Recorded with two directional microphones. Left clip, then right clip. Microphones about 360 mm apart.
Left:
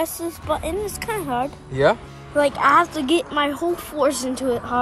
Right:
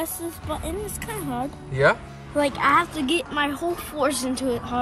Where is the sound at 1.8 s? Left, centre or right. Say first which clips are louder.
Left 2 dB; centre.